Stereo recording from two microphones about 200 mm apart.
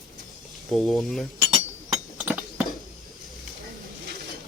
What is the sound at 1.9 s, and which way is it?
Chink, 5° right (ahead or behind).